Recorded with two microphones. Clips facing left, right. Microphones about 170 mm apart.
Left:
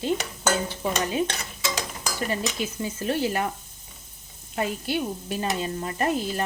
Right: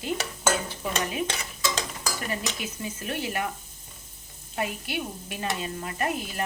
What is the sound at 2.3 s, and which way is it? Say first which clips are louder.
Stir: left 4 dB; 30° left (ahead or behind).